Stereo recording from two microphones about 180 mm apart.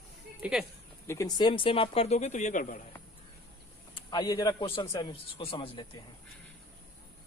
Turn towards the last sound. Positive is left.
turn(degrees=30)  # may be behind; listen again after turning